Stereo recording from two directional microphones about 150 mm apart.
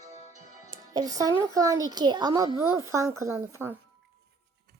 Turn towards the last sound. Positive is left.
turn(degrees=-15)  # may be behind; listen again after turning